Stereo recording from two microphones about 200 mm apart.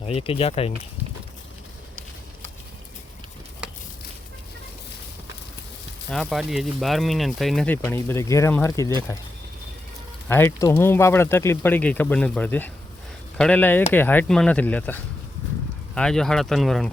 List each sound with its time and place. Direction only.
0.0 s speech: 30° left (ahead or behind)
6.1 s speech: centre (ahead or behind)
10.2 s speech: 10° left (ahead or behind)
16.0 s speech: 5° left (ahead or behind)